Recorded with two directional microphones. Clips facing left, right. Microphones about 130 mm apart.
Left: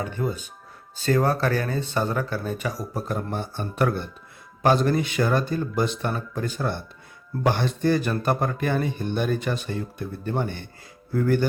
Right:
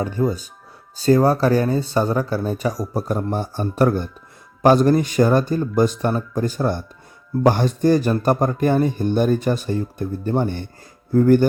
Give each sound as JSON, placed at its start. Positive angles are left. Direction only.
{"t": 0.0, "sound": "speech", "side_deg": -35}